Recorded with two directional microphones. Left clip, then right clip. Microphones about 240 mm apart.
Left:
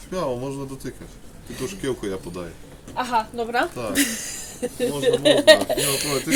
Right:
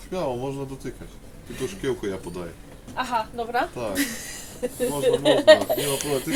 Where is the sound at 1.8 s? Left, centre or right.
Left.